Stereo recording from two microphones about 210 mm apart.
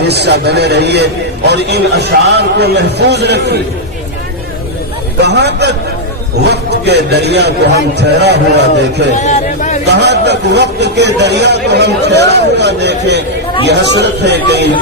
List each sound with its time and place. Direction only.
0.1 s a man's voice: 55° right (ahead or behind)
5.2 s a man's voice: 55° right (ahead or behind)
9.1 s a sound: 35° left (ahead or behind)
9.8 s a man's voice: 55° right (ahead or behind)